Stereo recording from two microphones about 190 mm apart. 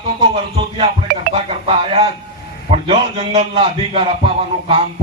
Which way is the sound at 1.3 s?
30° right (ahead or behind).